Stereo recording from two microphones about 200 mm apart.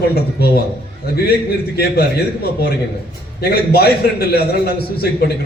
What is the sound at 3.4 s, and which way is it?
A man's voice, 50° left (ahead or behind).